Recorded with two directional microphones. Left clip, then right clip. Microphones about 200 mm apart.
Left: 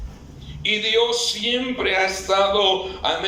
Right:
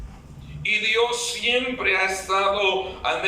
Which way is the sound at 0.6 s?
25° left (ahead or behind).